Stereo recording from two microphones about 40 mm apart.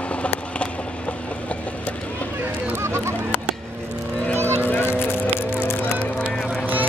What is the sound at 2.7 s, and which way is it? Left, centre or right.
Run, right.